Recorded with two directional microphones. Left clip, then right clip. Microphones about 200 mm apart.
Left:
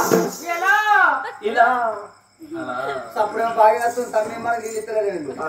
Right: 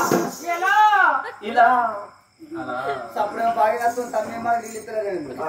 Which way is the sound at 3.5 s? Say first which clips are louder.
Left 7 dB; 10° left (ahead or behind).